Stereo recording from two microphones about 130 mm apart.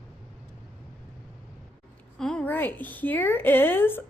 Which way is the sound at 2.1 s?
5° left (ahead or behind).